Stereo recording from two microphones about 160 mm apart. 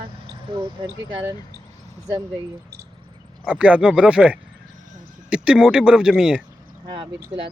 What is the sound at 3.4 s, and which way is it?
Speech, 5° right (ahead or behind).